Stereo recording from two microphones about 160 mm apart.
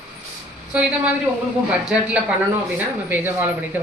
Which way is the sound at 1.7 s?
5° right (ahead or behind).